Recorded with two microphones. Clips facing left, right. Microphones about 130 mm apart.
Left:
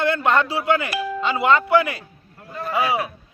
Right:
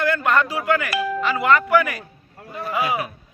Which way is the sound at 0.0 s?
30° left (ahead or behind).